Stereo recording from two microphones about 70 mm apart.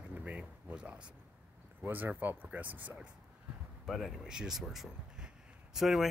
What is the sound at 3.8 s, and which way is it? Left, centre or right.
Speech, centre.